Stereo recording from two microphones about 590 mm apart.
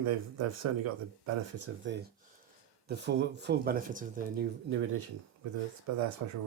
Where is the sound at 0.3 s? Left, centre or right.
Right.